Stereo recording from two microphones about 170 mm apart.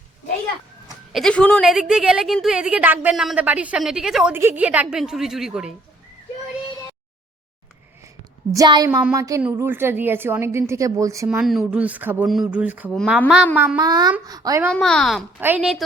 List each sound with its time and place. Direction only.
1.1 s a woman's voice: 5° left (ahead or behind)
8.5 s a woman's voice: 25° right (ahead or behind)
11.3 s a woman's voice: 5° right (ahead or behind)
12.9 s a woman's voice: 5° left (ahead or behind)
13.1 s a woman's voice: 5° right (ahead or behind)
13.7 s a woman's voice: 25° right (ahead or behind)
14.7 s a woman's voice: 5° left (ahead or behind)
15.4 s a woman's voice: 10° right (ahead or behind)